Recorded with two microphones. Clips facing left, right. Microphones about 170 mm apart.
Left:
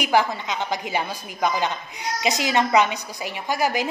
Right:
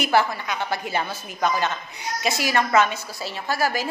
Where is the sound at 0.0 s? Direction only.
15° left (ahead or behind).